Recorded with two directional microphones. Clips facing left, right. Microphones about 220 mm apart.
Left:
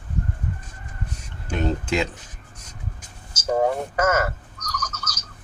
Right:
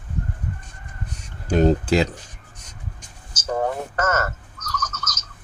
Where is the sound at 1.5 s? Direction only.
35° right (ahead or behind).